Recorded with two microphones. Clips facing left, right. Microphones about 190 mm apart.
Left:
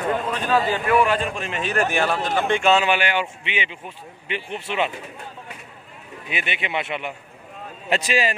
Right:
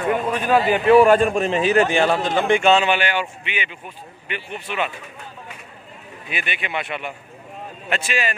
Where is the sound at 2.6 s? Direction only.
5° left (ahead or behind); by 4.9 s 25° left (ahead or behind).